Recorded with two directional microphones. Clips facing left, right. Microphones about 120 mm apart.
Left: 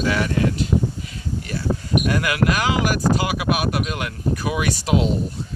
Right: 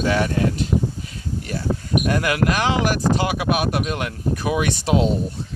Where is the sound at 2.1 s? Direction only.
35° right (ahead or behind).